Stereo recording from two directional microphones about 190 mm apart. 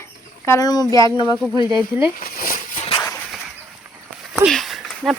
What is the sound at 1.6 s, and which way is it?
Speech, 15° right (ahead or behind).